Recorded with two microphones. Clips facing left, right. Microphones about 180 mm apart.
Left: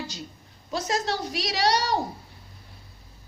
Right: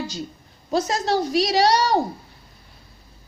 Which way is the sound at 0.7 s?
40° right (ahead or behind).